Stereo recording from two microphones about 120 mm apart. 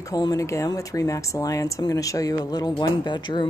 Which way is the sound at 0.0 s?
30° left (ahead or behind).